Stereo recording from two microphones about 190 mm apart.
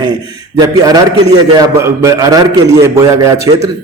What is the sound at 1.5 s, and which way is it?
A man's voice, 20° right (ahead or behind).